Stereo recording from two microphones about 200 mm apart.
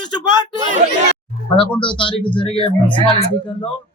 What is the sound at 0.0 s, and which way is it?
Speech, 20° left (ahead or behind).